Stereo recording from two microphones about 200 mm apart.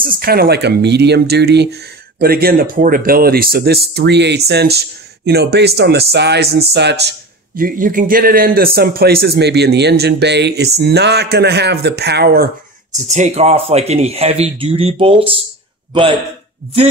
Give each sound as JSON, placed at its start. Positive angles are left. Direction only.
{"t": 0.0, "sound": "speech", "side_deg": -50}
{"t": 12.9, "sound": "a man's voice", "side_deg": -35}